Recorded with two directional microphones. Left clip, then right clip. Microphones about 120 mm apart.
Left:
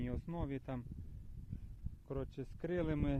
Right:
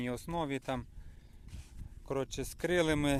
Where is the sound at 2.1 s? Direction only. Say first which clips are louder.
Right 9 dB; 25° right (ahead or behind).